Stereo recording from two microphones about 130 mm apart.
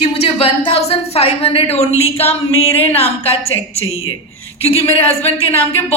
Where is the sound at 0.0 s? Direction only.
50° left (ahead or behind).